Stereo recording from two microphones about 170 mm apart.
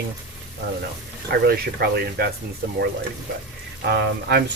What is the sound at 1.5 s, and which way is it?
Speech, 65° right (ahead or behind).